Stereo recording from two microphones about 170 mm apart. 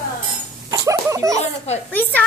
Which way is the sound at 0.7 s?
20° right (ahead or behind).